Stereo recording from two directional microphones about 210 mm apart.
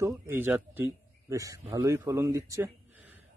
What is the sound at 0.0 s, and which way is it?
Speech, 10° right (ahead or behind).